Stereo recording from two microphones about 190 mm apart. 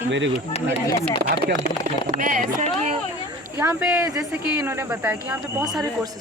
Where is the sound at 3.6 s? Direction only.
10° right (ahead or behind).